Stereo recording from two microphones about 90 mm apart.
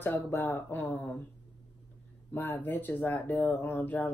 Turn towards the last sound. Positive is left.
turn(degrees=20)  # may be behind; listen again after turning